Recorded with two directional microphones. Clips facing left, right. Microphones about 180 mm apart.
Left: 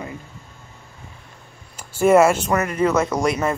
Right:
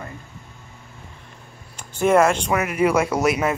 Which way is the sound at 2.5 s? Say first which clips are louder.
Even; 10° right (ahead or behind).